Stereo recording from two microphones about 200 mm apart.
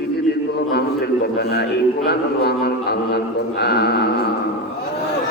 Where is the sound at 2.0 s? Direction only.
55° left (ahead or behind).